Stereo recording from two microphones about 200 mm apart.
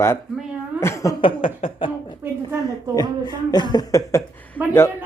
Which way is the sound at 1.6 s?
25° left (ahead or behind).